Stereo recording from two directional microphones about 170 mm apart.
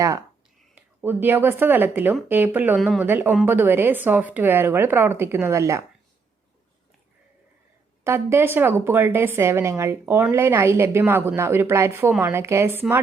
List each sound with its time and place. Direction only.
0.0 s a woman's voice: 20° right (ahead or behind)
2.8 s speech: centre (ahead or behind)
3.1 s a woman's voice: 10° right (ahead or behind)
8.0 s a woman's voice: 15° right (ahead or behind)